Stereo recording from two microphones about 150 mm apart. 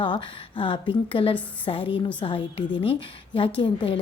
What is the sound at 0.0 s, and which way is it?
A woman's voice, 35° left (ahead or behind).